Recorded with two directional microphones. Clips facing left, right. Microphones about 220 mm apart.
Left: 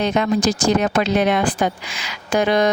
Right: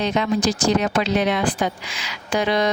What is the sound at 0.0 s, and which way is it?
Speech, 50° left (ahead or behind).